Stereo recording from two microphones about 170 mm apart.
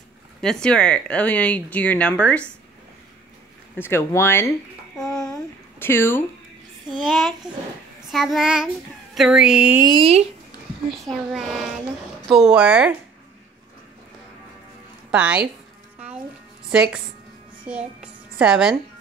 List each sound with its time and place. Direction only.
0.4 s speech: 5° left (ahead or behind)
3.7 s speech: 15° left (ahead or behind)
4.9 s a sound: 5° left (ahead or behind)
5.2 s a sound: 15° left (ahead or behind)
7.1 s a child's voice: centre (ahead or behind)
9.9 s speech: 35° right (ahead or behind)
10.9 s a child's voice: centre (ahead or behind)
15.0 s speech: 5° right (ahead or behind)
16.7 s a child's voice: 5° right (ahead or behind)